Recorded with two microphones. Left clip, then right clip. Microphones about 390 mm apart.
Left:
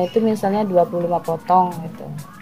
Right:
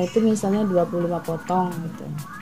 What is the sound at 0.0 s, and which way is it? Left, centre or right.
Speech, left.